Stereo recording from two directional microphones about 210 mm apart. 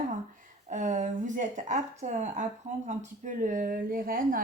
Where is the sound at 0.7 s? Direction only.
35° right (ahead or behind).